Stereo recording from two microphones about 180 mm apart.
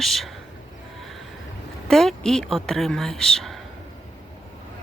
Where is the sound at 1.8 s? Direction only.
Centre (ahead or behind).